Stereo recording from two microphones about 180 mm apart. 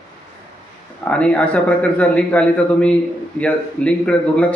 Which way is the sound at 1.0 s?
5° left (ahead or behind).